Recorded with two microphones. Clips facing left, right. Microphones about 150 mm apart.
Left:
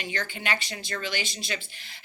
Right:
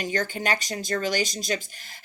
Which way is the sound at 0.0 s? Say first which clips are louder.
Right 6 dB; 40° right (ahead or behind).